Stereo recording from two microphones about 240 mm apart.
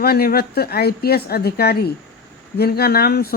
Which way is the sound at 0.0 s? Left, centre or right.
Left.